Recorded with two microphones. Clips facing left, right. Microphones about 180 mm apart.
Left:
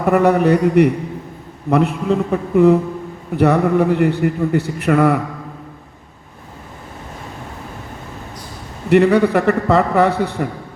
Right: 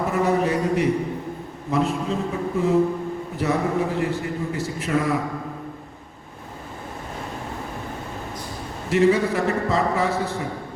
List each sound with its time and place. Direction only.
0.0 s a man's voice: 65° left (ahead or behind)
8.9 s a man's voice: 65° left (ahead or behind)